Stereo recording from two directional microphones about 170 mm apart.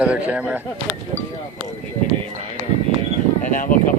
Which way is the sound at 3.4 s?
50° left (ahead or behind).